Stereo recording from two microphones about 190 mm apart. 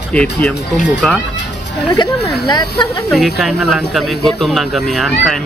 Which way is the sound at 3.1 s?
Centre (ahead or behind).